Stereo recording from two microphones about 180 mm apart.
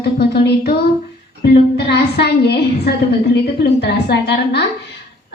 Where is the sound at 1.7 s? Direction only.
65° left (ahead or behind).